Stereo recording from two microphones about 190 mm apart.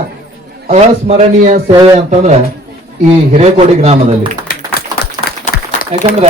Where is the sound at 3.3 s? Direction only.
35° right (ahead or behind).